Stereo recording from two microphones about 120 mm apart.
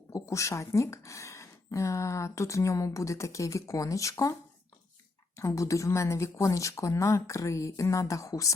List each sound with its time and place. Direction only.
0.1 s speech: 25° left (ahead or behind)
5.4 s speech: 25° left (ahead or behind)